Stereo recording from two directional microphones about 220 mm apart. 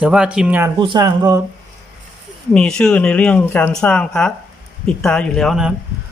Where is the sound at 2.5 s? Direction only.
5° left (ahead or behind).